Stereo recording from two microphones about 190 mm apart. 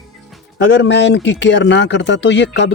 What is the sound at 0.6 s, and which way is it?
Speech, 70° left (ahead or behind).